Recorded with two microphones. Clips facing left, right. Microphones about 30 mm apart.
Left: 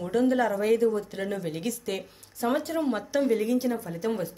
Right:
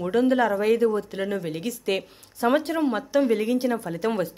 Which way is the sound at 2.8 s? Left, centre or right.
Centre.